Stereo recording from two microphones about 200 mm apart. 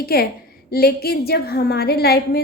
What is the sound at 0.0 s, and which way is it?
A woman's voice, 50° left (ahead or behind).